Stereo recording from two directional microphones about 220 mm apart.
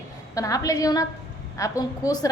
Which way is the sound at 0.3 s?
15° left (ahead or behind).